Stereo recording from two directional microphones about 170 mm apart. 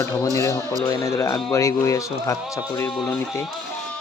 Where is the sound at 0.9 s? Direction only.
20° left (ahead or behind).